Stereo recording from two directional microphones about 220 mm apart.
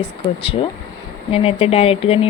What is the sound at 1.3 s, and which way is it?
Speech, 25° left (ahead or behind).